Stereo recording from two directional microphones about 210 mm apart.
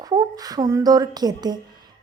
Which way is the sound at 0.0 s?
20° right (ahead or behind).